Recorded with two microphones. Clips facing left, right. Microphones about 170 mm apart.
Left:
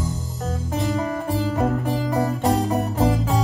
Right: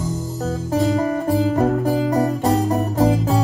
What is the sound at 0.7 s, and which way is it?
Music, 35° right (ahead or behind).